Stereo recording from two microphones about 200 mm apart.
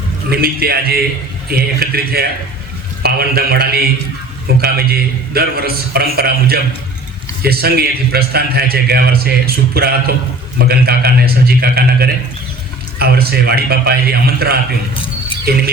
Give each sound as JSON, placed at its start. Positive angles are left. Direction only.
{"t": 0.3, "sound": "a man's voice", "side_deg": -50}